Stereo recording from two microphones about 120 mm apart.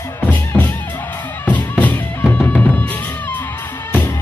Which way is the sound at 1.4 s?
15° left (ahead or behind).